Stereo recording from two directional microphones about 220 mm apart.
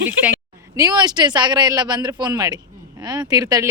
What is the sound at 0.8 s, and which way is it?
A woman's voice, 20° right (ahead or behind).